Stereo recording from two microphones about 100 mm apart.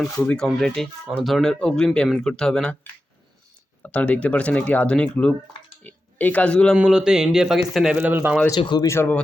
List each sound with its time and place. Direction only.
0.2 s speech: 15° left (ahead or behind)
0.4 s speech: centre (ahead or behind)
3.8 s speech: 15° left (ahead or behind)
6.7 s a man's voice: 5° right (ahead or behind)
7.9 s a man's voice: 15° right (ahead or behind)
8.6 s speech: 45° left (ahead or behind)
8.9 s speech: 25° left (ahead or behind)